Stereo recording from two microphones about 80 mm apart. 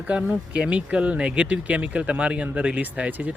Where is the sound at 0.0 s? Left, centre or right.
Centre.